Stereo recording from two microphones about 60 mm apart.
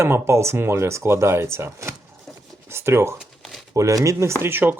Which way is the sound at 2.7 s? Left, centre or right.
Right.